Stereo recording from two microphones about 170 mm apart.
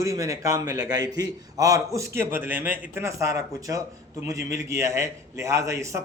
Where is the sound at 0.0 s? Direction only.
20° right (ahead or behind).